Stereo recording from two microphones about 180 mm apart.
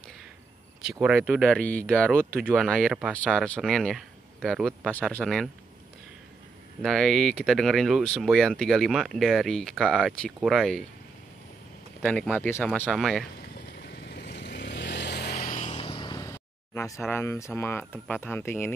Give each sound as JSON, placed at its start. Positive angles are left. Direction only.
{"t": 0.9, "sound": "speech", "side_deg": -5}
{"t": 2.4, "sound": "speech", "side_deg": -5}
{"t": 6.8, "sound": "speech", "side_deg": 0}
{"t": 12.0, "sound": "speech", "side_deg": 5}
{"t": 13.4, "sound": "vehicle", "side_deg": 65}
{"t": 15.3, "sound": "a sound", "side_deg": 40}
{"t": 17.1, "sound": "speech", "side_deg": 15}